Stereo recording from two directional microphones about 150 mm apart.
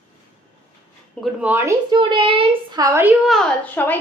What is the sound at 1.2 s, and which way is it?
Speech, 10° right (ahead or behind).